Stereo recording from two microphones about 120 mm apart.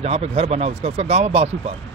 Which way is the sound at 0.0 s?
60° right (ahead or behind).